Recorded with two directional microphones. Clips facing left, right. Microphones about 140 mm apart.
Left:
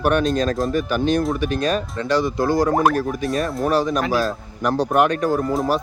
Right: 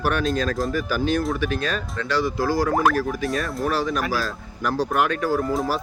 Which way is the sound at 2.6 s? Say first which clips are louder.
Left 1 dB; 40° left (ahead or behind).